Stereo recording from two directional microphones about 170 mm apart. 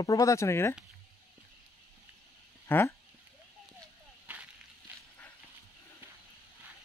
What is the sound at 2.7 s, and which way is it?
Speech, 15° left (ahead or behind).